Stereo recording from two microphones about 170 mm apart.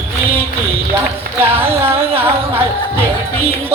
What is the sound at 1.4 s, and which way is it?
Speech, 15° right (ahead or behind).